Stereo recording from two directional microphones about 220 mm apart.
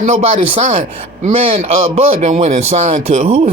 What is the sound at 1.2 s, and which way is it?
A man's voice, 30° right (ahead or behind).